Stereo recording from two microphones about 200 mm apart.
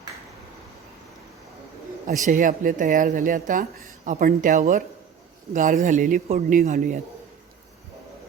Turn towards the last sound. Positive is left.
turn(degrees=-40)  # may be behind; listen again after turning